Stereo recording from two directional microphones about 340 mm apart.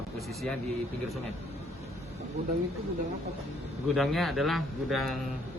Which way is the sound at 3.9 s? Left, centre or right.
Centre.